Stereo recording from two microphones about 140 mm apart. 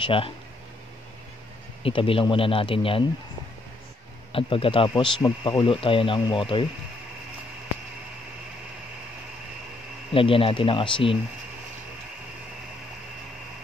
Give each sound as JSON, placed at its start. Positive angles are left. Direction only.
{"t": 0.0, "sound": "speech", "side_deg": 40}
{"t": 1.8, "sound": "speech", "side_deg": 40}
{"t": 4.3, "sound": "speech", "side_deg": 40}
{"t": 10.1, "sound": "speech", "side_deg": 40}